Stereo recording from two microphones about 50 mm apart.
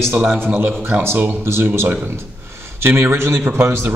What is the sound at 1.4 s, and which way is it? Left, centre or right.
A man's voice, right.